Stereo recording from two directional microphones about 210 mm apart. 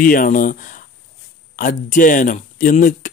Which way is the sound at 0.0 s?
40° left (ahead or behind).